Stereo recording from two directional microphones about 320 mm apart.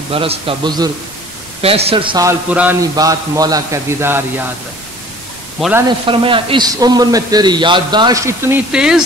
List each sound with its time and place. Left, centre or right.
0.1 s a man's voice: centre
5.6 s a man's voice: centre